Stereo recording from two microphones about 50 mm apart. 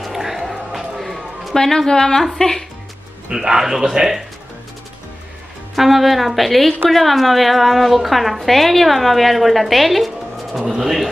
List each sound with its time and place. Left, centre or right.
0.0 s a sound: centre
1.6 s a woman's voice: centre
3.3 s speech: centre
5.8 s a woman's voice: centre